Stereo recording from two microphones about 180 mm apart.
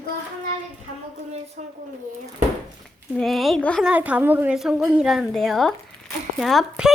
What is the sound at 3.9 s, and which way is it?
A woman's voice, 10° right (ahead or behind).